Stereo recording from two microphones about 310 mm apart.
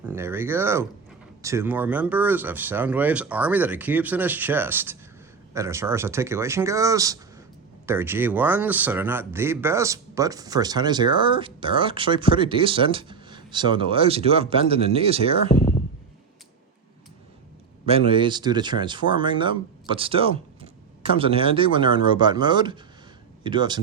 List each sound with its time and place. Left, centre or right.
0.0 s speech: centre
17.8 s speech: centre